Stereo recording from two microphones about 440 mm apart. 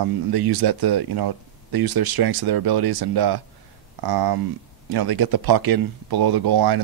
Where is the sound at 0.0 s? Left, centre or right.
Right.